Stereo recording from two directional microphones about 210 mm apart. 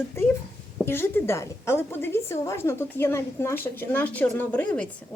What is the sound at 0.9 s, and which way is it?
A woman's voice, 10° left (ahead or behind).